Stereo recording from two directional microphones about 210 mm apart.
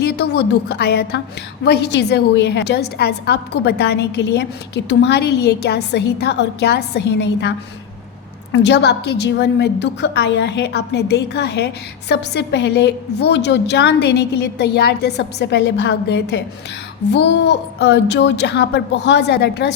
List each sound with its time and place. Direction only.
0.0 s a woman's voice: 50° left (ahead or behind)
8.5 s a woman's voice: 55° left (ahead or behind)